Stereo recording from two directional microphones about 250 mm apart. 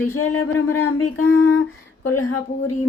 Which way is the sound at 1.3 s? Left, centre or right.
Left.